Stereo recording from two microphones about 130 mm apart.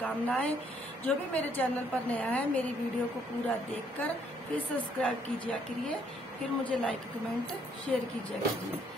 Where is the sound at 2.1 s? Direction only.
10° left (ahead or behind).